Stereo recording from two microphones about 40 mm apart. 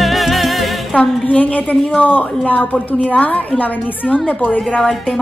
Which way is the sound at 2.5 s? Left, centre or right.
Left.